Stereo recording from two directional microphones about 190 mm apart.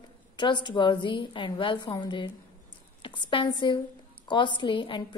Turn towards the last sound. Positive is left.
turn(degrees=25)  # may be behind; listen again after turning